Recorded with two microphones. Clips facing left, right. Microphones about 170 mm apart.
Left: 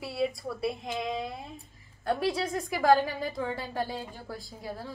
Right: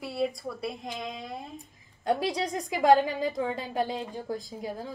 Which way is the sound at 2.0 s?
20° right (ahead or behind).